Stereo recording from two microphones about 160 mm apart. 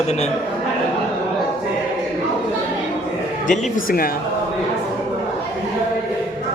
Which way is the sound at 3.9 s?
65° left (ahead or behind).